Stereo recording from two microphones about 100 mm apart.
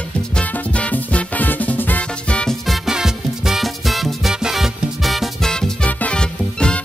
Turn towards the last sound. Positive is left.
turn(degrees=10)  # may be behind; listen again after turning